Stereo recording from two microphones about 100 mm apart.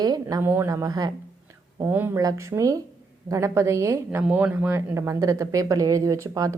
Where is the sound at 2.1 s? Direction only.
30° right (ahead or behind).